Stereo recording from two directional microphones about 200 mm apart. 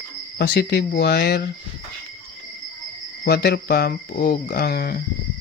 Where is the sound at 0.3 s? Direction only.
60° left (ahead or behind).